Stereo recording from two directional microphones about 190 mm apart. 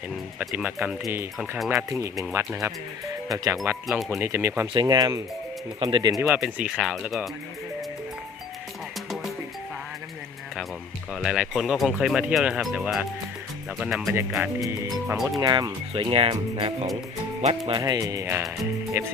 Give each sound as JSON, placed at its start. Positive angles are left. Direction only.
{"t": 0.3, "sound": "speech", "side_deg": -5}
{"t": 3.8, "sound": "speech", "side_deg": 0}
{"t": 4.2, "sound": "speech", "side_deg": -15}
{"t": 6.2, "sound": "speech", "side_deg": -5}
{"t": 11.1, "sound": "speech", "side_deg": 0}
{"t": 15.4, "sound": "speech", "side_deg": -20}